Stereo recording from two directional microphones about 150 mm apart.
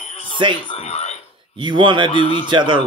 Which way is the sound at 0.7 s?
45° left (ahead or behind).